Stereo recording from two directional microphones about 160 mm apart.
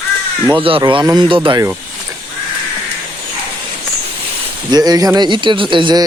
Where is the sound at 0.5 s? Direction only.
30° right (ahead or behind).